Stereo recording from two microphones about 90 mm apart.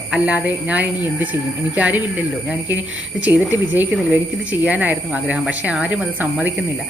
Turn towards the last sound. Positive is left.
turn(degrees=-15)  # may be behind; listen again after turning